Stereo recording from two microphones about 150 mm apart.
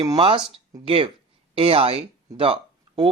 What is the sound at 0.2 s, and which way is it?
Speech, 35° right (ahead or behind).